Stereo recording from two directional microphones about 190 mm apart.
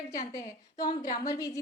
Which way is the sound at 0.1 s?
15° left (ahead or behind).